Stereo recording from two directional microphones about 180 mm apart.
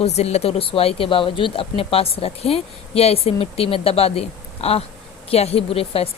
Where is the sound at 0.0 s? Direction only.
35° left (ahead or behind).